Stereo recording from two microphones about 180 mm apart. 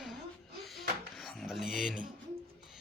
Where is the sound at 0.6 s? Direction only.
Centre (ahead or behind).